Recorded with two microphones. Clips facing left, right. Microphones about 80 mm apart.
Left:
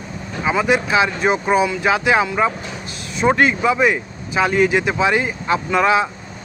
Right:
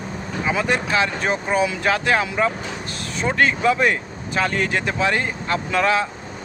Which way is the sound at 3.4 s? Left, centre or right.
Centre.